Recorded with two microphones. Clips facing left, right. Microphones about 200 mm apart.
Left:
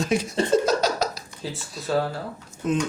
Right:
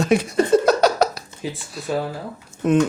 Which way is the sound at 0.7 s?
65° right (ahead or behind).